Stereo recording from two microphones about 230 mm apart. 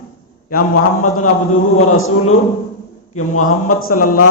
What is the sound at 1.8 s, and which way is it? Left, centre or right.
Speech, left.